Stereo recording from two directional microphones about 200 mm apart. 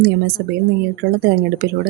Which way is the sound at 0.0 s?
50° right (ahead or behind).